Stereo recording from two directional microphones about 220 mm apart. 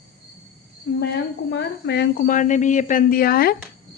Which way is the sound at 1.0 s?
50° left (ahead or behind).